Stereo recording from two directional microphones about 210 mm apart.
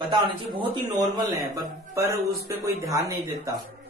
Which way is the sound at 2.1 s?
45° right (ahead or behind).